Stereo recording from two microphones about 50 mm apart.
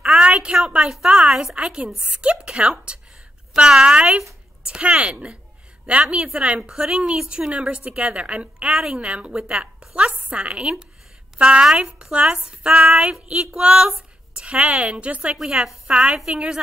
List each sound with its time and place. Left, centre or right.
0.2 s a sound: right
0.6 s a woman's voice: centre
15.3 s a woman's voice: centre